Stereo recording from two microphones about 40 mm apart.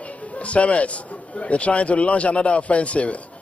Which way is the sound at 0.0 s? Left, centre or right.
Left.